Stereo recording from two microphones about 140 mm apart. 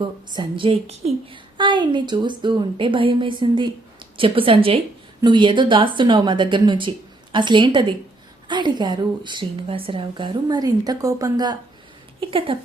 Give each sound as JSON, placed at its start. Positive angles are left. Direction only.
{"t": 0.0, "sound": "a woman's voice", "side_deg": -35}
{"t": 12.5, "sound": "a woman's voice", "side_deg": -40}